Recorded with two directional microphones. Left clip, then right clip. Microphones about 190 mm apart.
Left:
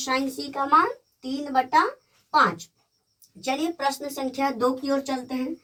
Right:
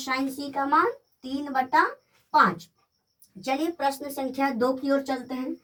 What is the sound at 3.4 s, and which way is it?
Speech, 25° left (ahead or behind).